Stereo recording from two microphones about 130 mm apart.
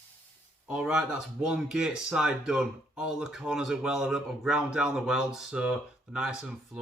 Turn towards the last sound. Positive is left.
turn(degrees=-5)  # may be behind; listen again after turning